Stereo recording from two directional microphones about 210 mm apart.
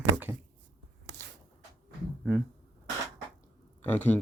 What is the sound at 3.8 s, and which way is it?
Speech, 10° left (ahead or behind).